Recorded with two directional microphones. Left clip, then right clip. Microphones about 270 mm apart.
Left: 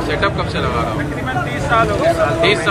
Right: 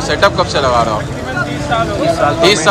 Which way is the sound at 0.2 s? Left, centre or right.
Centre.